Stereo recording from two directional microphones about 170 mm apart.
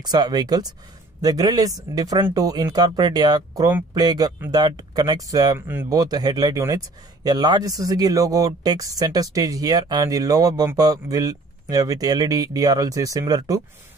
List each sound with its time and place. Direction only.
0.0 s speech: 25° right (ahead or behind)